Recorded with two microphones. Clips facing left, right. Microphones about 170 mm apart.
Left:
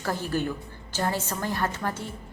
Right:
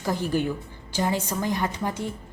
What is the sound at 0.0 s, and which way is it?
A woman's voice, 15° right (ahead or behind).